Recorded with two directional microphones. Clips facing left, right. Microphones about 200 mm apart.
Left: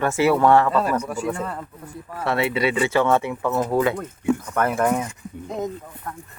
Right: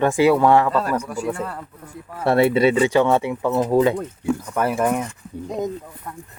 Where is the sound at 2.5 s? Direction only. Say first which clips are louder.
Right 5 dB; 30° right (ahead or behind).